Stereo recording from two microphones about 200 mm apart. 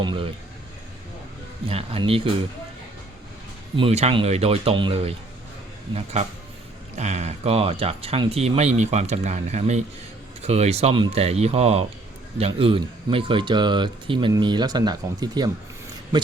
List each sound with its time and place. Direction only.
0.0 s speech: 25° right (ahead or behind)
1.6 s speech: 30° right (ahead or behind)
3.8 s speech: 30° right (ahead or behind)
6.9 s speech: 35° right (ahead or behind)